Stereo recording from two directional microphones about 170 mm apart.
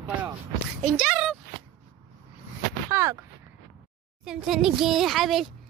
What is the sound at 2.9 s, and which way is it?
Speech, 20° right (ahead or behind).